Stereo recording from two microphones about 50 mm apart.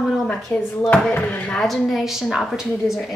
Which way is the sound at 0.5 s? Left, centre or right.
Left.